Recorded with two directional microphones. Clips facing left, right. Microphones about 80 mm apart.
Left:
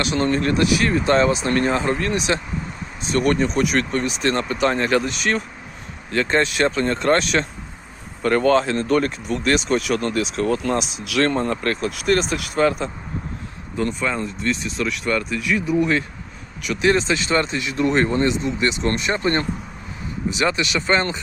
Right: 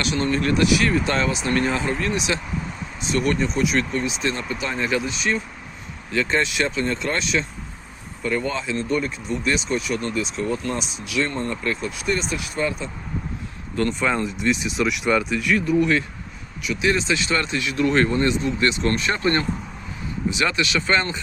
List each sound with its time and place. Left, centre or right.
0.0 s speech: left
6.1 s speech: left
8.2 s speech: left
14.0 s speech: centre
15.6 s speech: left
16.6 s speech: left